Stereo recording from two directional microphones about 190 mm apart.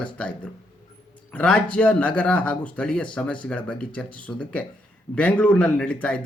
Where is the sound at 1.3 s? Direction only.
5° left (ahead or behind).